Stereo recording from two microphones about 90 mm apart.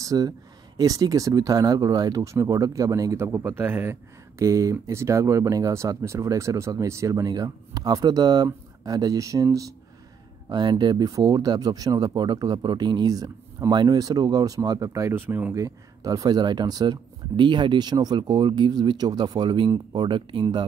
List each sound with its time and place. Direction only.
0.0 s speech: 40° right (ahead or behind); by 4.0 s 25° right (ahead or behind)
4.4 s speech: 40° right (ahead or behind)
7.2 s speech: 45° right (ahead or behind)
10.5 s speech: 55° right (ahead or behind); by 15.1 s 35° right (ahead or behind)
15.1 s speech: 25° right (ahead or behind)
15.5 s speech: 40° right (ahead or behind); by 20.4 s 60° right (ahead or behind)